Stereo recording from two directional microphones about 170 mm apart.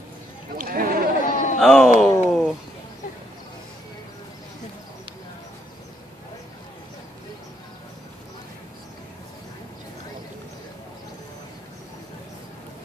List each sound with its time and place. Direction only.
0.6 s sheep: 55° right (ahead or behind)
1.2 s a sound: 50° left (ahead or behind)
1.6 s speech: 5° left (ahead or behind)